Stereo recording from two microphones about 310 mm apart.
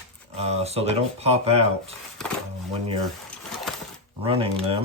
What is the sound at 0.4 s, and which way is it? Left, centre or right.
Speech, centre.